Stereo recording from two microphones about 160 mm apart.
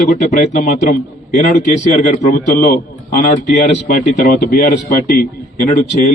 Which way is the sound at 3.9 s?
55° left (ahead or behind).